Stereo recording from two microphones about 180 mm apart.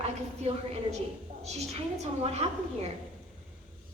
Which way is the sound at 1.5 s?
35° right (ahead or behind).